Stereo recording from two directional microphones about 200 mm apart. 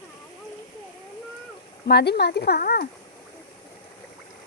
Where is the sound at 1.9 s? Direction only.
55° left (ahead or behind).